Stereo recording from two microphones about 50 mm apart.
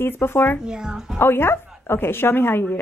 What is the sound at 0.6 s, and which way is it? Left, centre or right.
Speech, centre.